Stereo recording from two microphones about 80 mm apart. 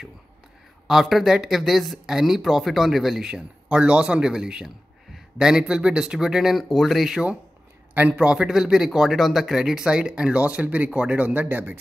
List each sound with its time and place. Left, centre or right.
0.8 s speech: centre; by 11.8 s right